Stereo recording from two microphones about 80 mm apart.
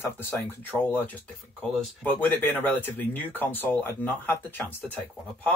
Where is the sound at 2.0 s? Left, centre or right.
Left.